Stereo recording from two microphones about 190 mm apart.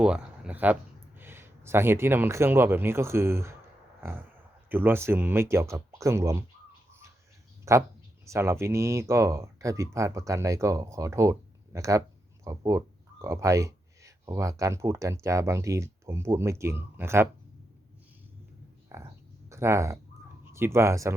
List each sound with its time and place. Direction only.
0.0 s speech: 5° right (ahead or behind)
7.6 s speech: 15° right (ahead or behind)
18.9 s speech: 15° right (ahead or behind)